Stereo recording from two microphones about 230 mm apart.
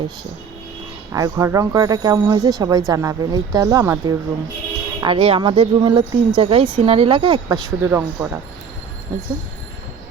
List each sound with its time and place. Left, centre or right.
1.1 s speech: centre